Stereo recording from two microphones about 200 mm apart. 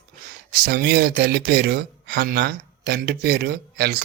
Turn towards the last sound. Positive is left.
turn(degrees=-50)  # may be behind; listen again after turning